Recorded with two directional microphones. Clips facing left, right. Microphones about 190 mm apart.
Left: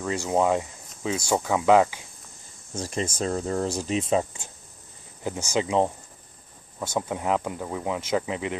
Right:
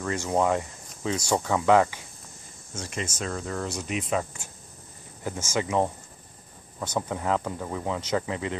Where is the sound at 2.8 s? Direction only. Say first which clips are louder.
Left 5 dB; 35° left (ahead or behind).